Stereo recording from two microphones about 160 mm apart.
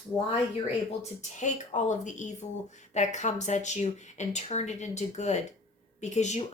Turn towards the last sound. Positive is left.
turn(degrees=45)  # may be behind; listen again after turning